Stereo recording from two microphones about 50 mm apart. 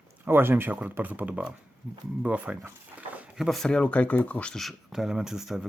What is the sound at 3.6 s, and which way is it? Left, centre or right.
Speech, left.